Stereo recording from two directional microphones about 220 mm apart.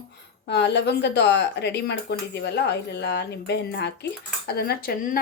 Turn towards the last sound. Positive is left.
turn(degrees=40)  # may be behind; listen again after turning